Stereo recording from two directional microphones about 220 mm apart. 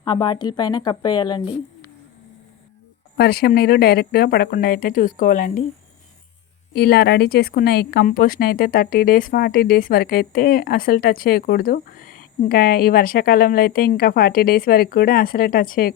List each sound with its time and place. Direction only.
0.0 s speech: 20° left (ahead or behind)
3.2 s speech: 45° left (ahead or behind)
6.7 s a woman's voice: 45° left (ahead or behind)